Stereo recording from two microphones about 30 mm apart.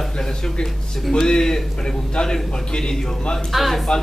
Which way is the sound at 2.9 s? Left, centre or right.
Centre.